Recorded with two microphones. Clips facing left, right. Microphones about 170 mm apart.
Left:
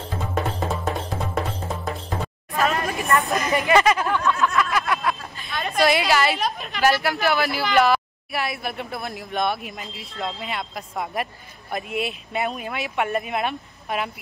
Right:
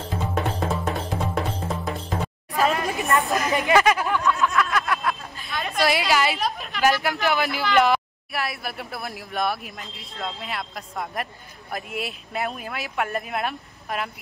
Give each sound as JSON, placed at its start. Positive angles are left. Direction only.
{"t": 0.3, "sound": "music", "side_deg": 0}
{"t": 2.5, "sound": "a sound", "side_deg": -15}
{"t": 3.3, "sound": "speech", "side_deg": 0}
{"t": 3.7, "sound": "snicker", "side_deg": 0}
{"t": 6.3, "sound": "speech", "side_deg": 0}
{"t": 6.8, "sound": "speech", "side_deg": -15}
{"t": 8.3, "sound": "speech", "side_deg": 0}